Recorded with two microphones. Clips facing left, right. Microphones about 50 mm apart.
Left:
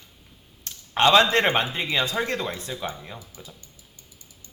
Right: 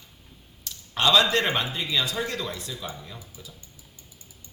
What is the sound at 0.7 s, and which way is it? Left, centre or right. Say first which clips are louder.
Speech: left 4 dB; left.